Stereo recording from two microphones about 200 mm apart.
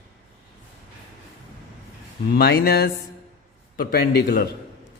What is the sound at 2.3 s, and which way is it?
Speech, 50° left (ahead or behind).